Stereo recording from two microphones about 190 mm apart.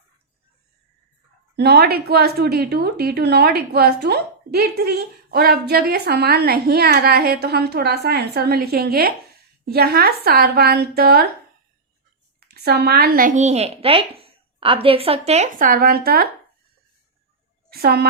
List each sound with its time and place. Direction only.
1.5 s a woman's voice: 55° right (ahead or behind)
12.4 s speech: 55° right (ahead or behind)
17.7 s a woman's voice: 55° right (ahead or behind)